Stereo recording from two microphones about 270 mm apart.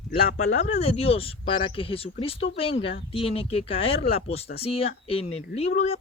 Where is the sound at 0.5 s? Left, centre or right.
Left.